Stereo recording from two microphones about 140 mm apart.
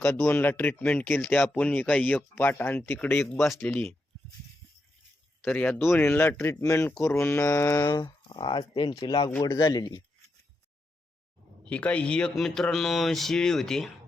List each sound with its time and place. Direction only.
0.1 s speech: 15° left (ahead or behind)
3.3 s speech: centre (ahead or behind)
3.6 s speech: 10° left (ahead or behind)
5.4 s speech: 10° left (ahead or behind); by 10.0 s 25° left (ahead or behind)
11.7 s speech: 10° left (ahead or behind)